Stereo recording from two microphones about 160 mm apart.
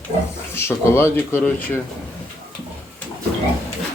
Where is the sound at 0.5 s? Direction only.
15° left (ahead or behind).